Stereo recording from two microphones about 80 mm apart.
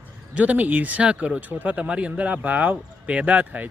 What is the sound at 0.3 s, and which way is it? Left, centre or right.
Speech, centre.